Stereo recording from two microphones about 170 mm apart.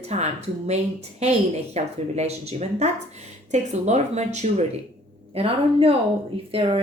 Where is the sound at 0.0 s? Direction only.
40° right (ahead or behind).